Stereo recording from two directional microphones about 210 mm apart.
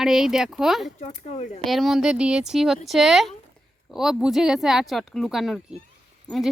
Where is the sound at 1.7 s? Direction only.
Centre (ahead or behind).